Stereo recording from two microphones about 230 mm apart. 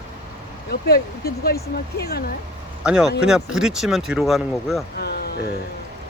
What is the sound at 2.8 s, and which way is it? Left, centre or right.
Speech, centre.